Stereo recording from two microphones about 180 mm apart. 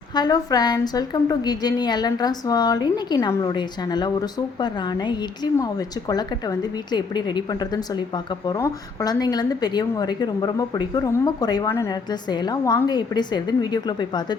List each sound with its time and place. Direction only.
0.1 s a woman's voice: 20° left (ahead or behind)